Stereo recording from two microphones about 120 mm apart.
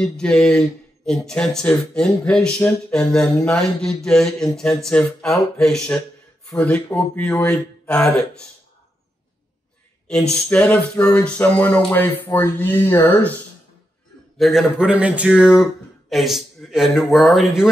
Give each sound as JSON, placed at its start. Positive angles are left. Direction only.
{"t": 0.0, "sound": "speech", "side_deg": 5}
{"t": 10.0, "sound": "speech", "side_deg": 10}
{"t": 14.4, "sound": "speech", "side_deg": 0}